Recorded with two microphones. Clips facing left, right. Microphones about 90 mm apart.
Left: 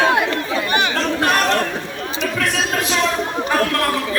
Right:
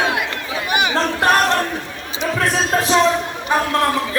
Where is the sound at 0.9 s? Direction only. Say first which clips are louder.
Right 2 dB; 35° right (ahead or behind).